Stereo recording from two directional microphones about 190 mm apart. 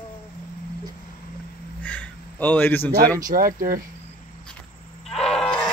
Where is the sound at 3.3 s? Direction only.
45° right (ahead or behind).